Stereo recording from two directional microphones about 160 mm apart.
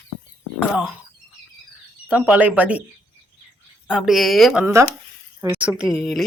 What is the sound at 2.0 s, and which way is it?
Speech, 10° right (ahead or behind).